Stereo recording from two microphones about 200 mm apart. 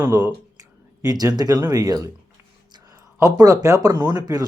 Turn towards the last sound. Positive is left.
turn(degrees=-20)  # may be behind; listen again after turning